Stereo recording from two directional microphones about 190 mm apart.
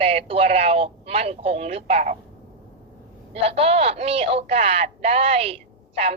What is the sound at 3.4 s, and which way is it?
A woman's voice, 30° right (ahead or behind).